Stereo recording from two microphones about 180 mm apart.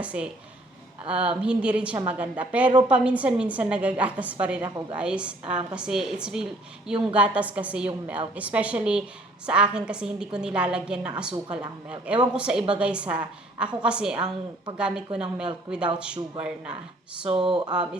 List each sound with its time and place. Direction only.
0.0 s a woman's voice: 5° right (ahead or behind)
17.2 s speech: 30° right (ahead or behind)